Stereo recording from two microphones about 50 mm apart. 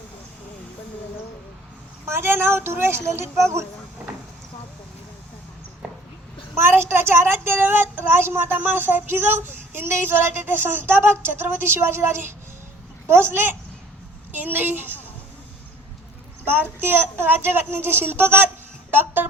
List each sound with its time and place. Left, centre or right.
2.0 s speech: right
4.0 s vehicle: right
6.5 s a child's voice: right
16.9 s a child's voice: right
18.9 s a sound: right